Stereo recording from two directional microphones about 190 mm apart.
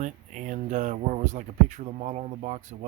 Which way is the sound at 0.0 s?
40° right (ahead or behind).